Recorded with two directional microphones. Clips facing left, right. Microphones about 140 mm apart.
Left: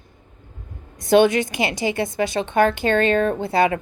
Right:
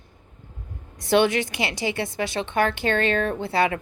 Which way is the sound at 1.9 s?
45° left (ahead or behind).